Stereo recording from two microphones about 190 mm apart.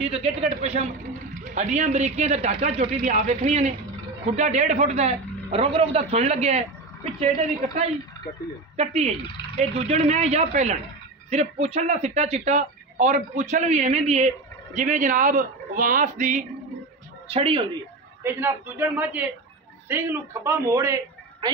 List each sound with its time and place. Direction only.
0.0 s speech: 30° right (ahead or behind)
8.7 s speech: 35° right (ahead or behind)
17.3 s speech: 30° right (ahead or behind)
18.2 s a woman's voice: 10° right (ahead or behind)